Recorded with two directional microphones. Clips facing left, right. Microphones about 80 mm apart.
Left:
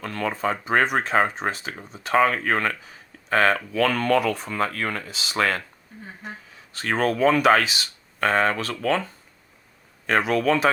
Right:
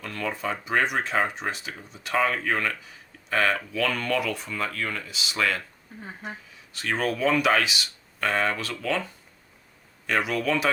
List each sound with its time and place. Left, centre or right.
0.0 s speech: left
6.7 s speech: left
10.1 s speech: left